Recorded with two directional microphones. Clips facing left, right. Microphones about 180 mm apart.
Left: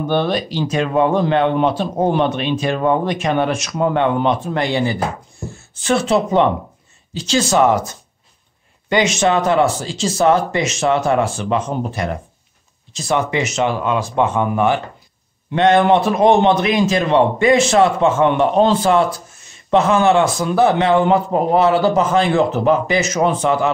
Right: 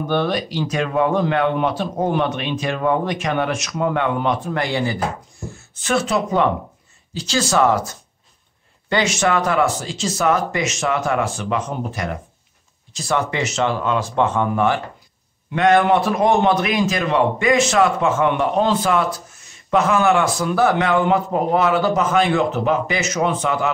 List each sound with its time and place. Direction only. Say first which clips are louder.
0.1 s a man's voice: left 2 dB; 25° left (ahead or behind)